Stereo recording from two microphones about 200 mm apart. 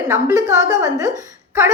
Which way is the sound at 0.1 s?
15° right (ahead or behind).